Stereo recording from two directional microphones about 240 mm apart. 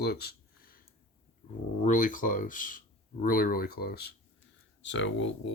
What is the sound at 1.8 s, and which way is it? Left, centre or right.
Speech, left.